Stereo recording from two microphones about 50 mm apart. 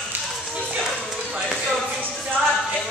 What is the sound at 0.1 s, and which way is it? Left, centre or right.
Music, right.